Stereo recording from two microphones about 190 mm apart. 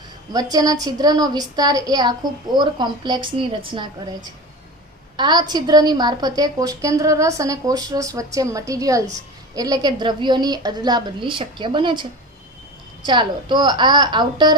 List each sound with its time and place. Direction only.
0.3 s a woman's voice: 20° right (ahead or behind)